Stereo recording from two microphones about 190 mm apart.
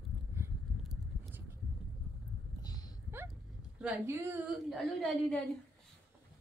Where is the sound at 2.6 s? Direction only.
20° left (ahead or behind).